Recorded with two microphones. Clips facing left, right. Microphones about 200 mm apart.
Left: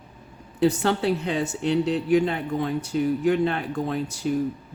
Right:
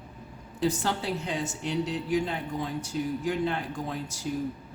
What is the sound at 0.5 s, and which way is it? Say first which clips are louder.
Speech: left 7 dB; 65° left (ahead or behind).